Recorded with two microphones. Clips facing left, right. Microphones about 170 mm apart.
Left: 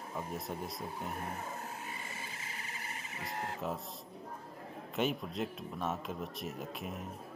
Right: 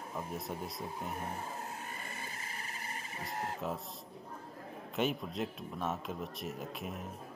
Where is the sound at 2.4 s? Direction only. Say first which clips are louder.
Right 1 dB; 45° right (ahead or behind).